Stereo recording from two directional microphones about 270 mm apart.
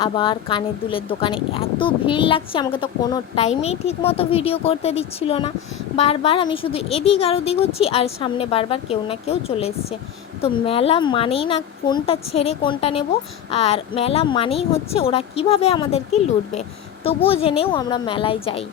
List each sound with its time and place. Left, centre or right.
0.0 s a woman's voice: centre